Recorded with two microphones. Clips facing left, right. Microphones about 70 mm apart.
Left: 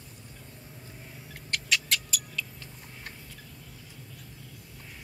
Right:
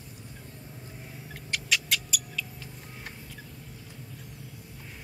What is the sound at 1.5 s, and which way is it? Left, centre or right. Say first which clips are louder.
Cat: even; centre.